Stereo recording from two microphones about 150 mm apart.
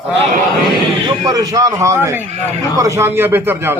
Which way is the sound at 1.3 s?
25° right (ahead or behind).